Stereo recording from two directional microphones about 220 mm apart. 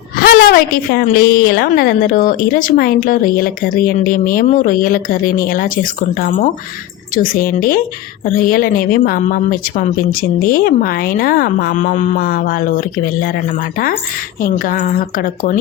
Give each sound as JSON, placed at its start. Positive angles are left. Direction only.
{"t": 0.2, "sound": "a woman's voice", "side_deg": 40}